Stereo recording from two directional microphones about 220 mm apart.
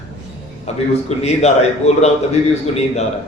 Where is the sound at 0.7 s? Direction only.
30° left (ahead or behind).